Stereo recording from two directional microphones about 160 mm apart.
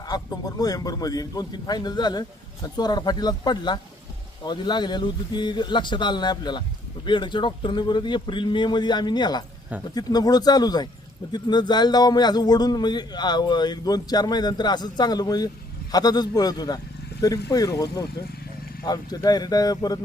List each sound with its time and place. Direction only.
0.1 s a man's voice: 25° left (ahead or behind)